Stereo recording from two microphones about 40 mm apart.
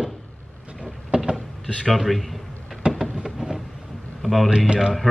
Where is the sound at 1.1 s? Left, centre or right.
Right.